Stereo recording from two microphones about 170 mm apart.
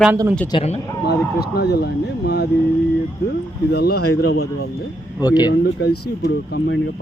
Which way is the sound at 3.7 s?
70° left (ahead or behind).